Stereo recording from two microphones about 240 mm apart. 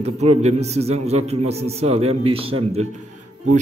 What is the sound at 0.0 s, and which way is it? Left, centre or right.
A man's voice, right.